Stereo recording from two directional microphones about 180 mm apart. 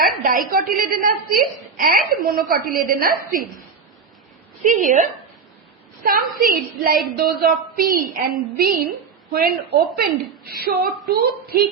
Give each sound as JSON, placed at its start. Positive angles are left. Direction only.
{"t": 0.0, "sound": "a woman's voice", "side_deg": -50}
{"t": 4.6, "sound": "a woman's voice", "side_deg": -45}